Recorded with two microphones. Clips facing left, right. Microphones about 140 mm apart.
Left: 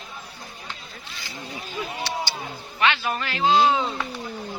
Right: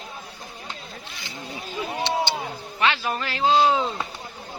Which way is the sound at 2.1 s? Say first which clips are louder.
Right 7 dB; 20° right (ahead or behind).